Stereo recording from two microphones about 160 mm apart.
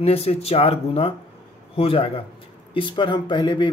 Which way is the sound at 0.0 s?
40° left (ahead or behind).